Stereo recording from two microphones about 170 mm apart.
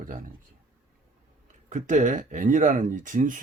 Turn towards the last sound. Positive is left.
turn(degrees=-50)  # may be behind; listen again after turning